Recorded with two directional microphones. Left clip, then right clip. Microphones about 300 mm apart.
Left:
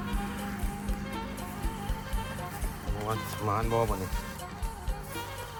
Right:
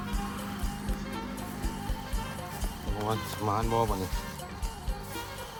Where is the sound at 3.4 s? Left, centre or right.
Centre.